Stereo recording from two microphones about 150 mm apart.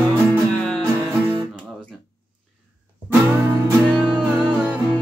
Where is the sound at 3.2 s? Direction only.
15° right (ahead or behind).